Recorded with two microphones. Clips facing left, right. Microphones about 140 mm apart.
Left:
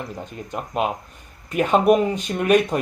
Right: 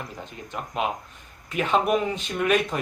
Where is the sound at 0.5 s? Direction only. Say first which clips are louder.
Left 4 dB; 45° left (ahead or behind).